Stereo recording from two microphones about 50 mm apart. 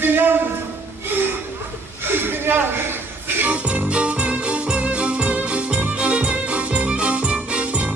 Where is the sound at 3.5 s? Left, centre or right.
Right.